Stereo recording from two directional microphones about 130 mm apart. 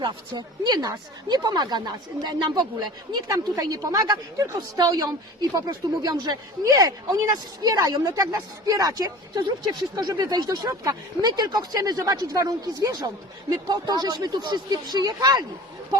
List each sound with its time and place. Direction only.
0.0 s a woman's voice: 35° right (ahead or behind)